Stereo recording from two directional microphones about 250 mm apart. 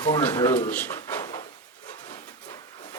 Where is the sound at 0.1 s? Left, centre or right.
Centre.